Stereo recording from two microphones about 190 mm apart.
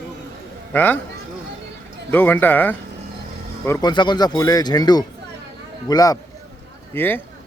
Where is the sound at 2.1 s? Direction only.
10° left (ahead or behind).